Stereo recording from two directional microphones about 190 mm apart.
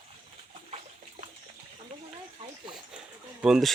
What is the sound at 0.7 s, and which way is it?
Water, 40° right (ahead or behind).